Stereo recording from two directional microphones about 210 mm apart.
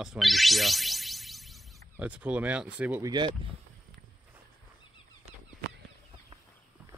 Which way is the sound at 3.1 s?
25° right (ahead or behind).